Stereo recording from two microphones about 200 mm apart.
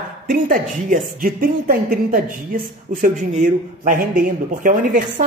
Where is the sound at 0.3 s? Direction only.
45° right (ahead or behind).